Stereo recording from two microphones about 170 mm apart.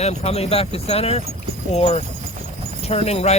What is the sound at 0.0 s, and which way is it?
Speech, 40° left (ahead or behind).